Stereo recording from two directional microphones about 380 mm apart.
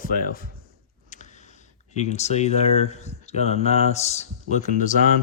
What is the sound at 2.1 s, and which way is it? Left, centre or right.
Speech, centre.